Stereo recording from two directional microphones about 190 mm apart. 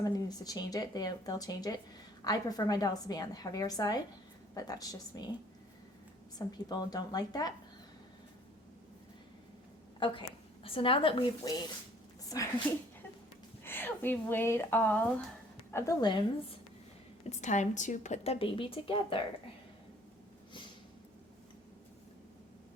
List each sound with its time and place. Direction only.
0.0 s speech: 20° left (ahead or behind)
6.7 s speech: 20° left (ahead or behind)
10.0 s a woman's voice: 25° left (ahead or behind)
13.7 s a woman's voice: 10° left (ahead or behind)
17.2 s speech: 40° left (ahead or behind)